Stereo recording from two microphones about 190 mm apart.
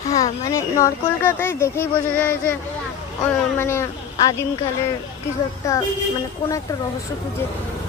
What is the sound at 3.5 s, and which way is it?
Speech, 15° left (ahead or behind).